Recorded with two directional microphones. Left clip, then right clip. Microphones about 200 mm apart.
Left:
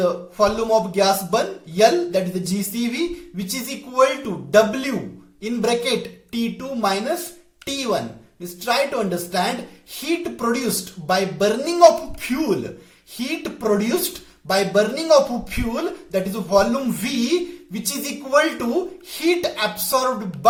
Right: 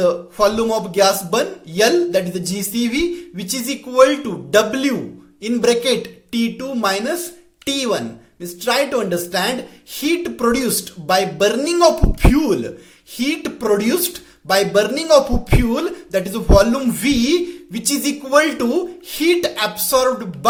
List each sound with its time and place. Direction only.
0.0 s speech: 40° right (ahead or behind)
13.1 s speech: 40° right (ahead or behind)